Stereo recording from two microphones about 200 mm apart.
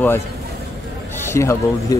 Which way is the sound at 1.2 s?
15° left (ahead or behind).